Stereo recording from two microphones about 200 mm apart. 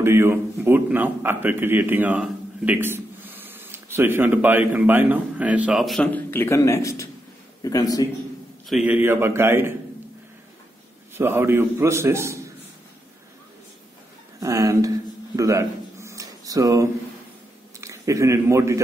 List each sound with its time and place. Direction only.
0.0 s a man's voice: 10° right (ahead or behind); by 8.1 s 20° left (ahead or behind)
8.6 s a man's voice: 5° right (ahead or behind)
11.1 s a man's voice: 10° right (ahead or behind)
14.4 s a man's voice: 15° right (ahead or behind)
15.3 s a sound: 15° right (ahead or behind)
17.7 s a man's voice: 15° right (ahead or behind)